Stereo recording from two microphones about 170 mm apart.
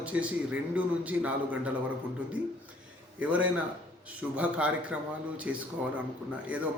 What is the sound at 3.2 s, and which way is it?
A man's voice, 10° right (ahead or behind).